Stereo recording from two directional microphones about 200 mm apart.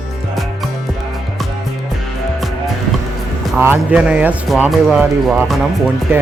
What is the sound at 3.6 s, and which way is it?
Speech, 10° right (ahead or behind).